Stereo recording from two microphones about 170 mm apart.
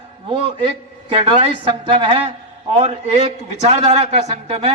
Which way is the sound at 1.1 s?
30° right (ahead or behind).